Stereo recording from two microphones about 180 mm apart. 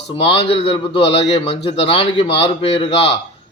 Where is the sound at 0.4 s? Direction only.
30° left (ahead or behind).